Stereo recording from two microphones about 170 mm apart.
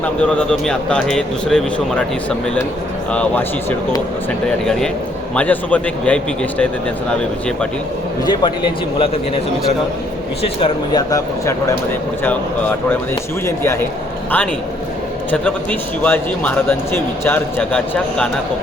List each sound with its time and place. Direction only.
0.0 s speech: 5° left (ahead or behind)
3.1 s speech: 10° left (ahead or behind)
8.2 s speech: 25° left (ahead or behind)
10.4 s speech: 30° left (ahead or behind)
12.2 s speech: 10° left (ahead or behind)
15.3 s speech: 10° left (ahead or behind)